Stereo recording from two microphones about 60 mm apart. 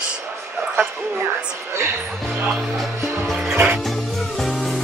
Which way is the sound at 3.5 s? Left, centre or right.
Right.